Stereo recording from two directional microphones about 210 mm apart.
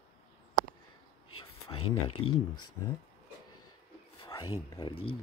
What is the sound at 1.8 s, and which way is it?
Speech, 90° left.